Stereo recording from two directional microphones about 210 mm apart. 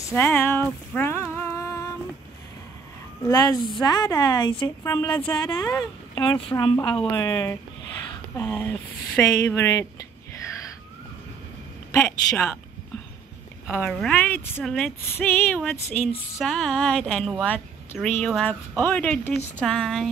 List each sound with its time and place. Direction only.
0.1 s a sound: 10° left (ahead or behind)
3.3 s a woman's voice: 15° left (ahead or behind)
7.2 s a woman's voice: 15° left (ahead or behind)
11.9 s a woman's voice: 5° left (ahead or behind)
13.7 s a woman's voice: 5° left (ahead or behind)